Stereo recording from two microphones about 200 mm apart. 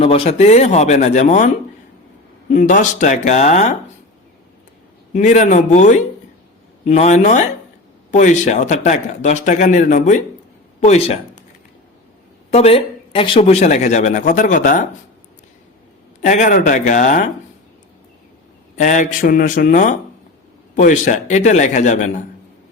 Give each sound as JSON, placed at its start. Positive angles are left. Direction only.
{"t": 0.0, "sound": "a man's voice", "side_deg": 30}
{"t": 2.5, "sound": "a man's voice", "side_deg": 40}
{"t": 5.1, "sound": "a man's voice", "side_deg": 35}
{"t": 12.5, "sound": "a man's voice", "side_deg": 30}
{"t": 16.2, "sound": "a man's voice", "side_deg": 40}
{"t": 18.8, "sound": "a man's voice", "side_deg": 40}